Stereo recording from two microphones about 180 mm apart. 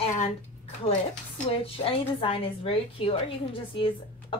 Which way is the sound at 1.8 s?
30° left (ahead or behind).